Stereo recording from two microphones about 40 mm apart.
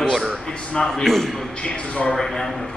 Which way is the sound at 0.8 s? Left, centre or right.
Centre.